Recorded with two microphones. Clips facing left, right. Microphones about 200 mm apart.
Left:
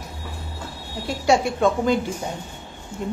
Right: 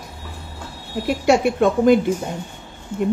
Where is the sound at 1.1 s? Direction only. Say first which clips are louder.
Right 3 dB; 60° right (ahead or behind).